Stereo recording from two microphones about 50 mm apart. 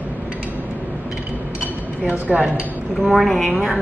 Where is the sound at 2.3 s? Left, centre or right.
Centre.